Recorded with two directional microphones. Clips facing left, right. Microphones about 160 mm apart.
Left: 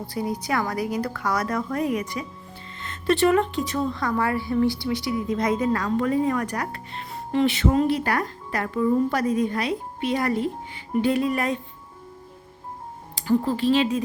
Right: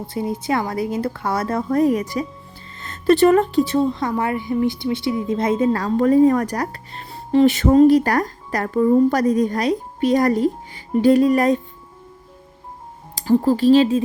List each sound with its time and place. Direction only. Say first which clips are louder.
0.0 s a woman's voice: right 3 dB; 25° right (ahead or behind); by 11.6 s 40° right (ahead or behind)
13.1 s a woman's voice: right 6 dB; 35° right (ahead or behind)